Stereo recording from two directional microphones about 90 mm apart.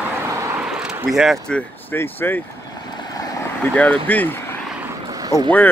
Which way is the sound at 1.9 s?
25° left (ahead or behind).